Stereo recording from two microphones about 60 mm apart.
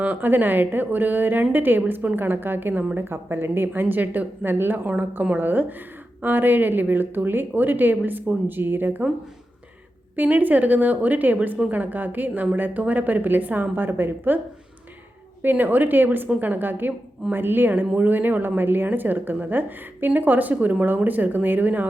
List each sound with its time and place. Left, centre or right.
0.0 s a woman's voice: right
10.2 s a woman's voice: right